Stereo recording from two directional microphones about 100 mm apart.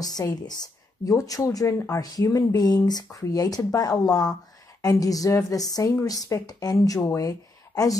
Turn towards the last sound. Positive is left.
turn(degrees=35)  # may be behind; listen again after turning